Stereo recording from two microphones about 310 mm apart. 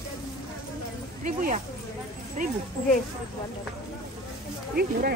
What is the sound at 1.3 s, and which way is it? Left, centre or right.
Speech, right.